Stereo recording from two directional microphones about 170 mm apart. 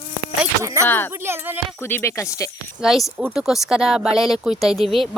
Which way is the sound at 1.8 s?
15° left (ahead or behind).